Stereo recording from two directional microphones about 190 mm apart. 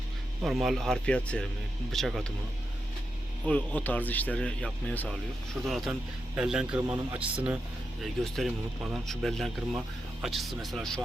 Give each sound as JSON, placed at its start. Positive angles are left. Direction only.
{"t": 0.4, "sound": "speech", "side_deg": 0}
{"t": 3.4, "sound": "speech", "side_deg": 5}
{"t": 8.0, "sound": "speech", "side_deg": 0}